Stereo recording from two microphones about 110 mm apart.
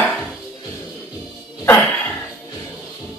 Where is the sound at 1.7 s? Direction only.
15° left (ahead or behind).